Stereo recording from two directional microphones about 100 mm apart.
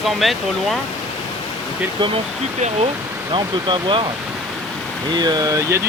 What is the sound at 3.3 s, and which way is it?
Speech, 55° right (ahead or behind).